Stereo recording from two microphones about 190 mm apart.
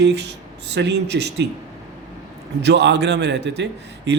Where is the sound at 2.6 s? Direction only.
65° right (ahead or behind).